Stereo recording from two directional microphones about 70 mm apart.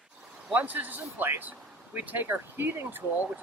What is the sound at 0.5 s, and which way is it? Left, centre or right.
Speech, right.